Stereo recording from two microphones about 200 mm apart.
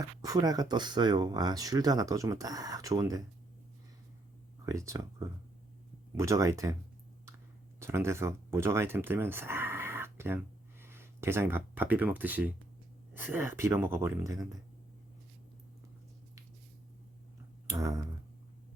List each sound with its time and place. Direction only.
0.2 s speech: 20° right (ahead or behind)
4.6 s speech: 15° right (ahead or behind)
7.8 s speech: 15° right (ahead or behind)
17.7 s a sound: 15° right (ahead or behind)